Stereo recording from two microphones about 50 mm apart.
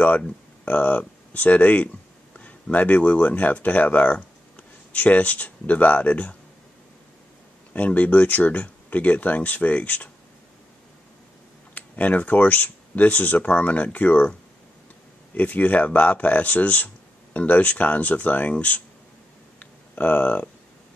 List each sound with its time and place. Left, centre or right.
0.0 s speech: left
7.7 s a man's voice: left
11.7 s a man's voice: left
15.3 s a man's voice: left
19.6 s a sound: left